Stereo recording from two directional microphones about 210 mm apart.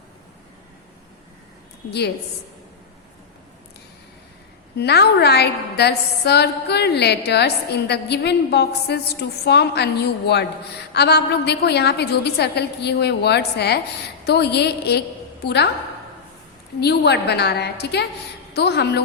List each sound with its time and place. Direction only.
4.8 s a woman's voice: 50° left (ahead or behind)
16.8 s a woman's voice: 55° left (ahead or behind)